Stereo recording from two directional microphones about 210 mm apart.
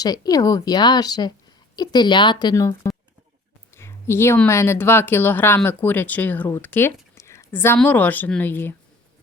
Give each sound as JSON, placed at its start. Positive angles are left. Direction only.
{"t": 0.0, "sound": "a woman's voice", "side_deg": 20}